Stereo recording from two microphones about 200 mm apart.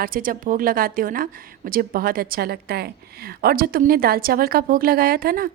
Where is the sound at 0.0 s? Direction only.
45° right (ahead or behind).